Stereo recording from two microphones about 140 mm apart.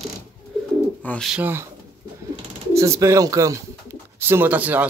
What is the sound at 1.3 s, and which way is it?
Speech, 15° right (ahead or behind).